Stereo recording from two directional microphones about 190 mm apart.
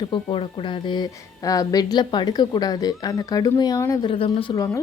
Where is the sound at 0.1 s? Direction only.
30° left (ahead or behind).